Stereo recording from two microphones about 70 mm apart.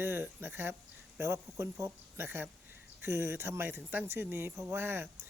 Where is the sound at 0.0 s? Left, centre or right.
Right.